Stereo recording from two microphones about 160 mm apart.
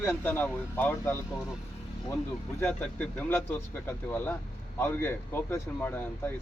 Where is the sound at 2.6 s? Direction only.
10° left (ahead or behind).